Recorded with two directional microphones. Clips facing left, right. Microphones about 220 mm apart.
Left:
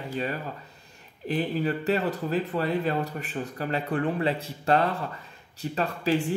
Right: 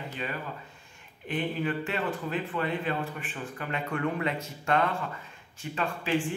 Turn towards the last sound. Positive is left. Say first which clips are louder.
# left 3 dB
turn(degrees=40)  # may be behind; listen again after turning